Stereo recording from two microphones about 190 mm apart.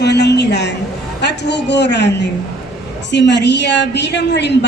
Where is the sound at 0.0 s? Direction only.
60° left (ahead or behind).